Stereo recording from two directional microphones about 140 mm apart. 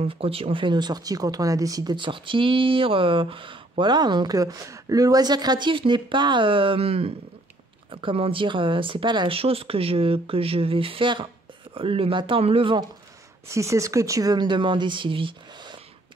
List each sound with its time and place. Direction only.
0.0 s speech: 40° right (ahead or behind)
13.5 s speech: 20° right (ahead or behind); by 15.8 s 35° right (ahead or behind)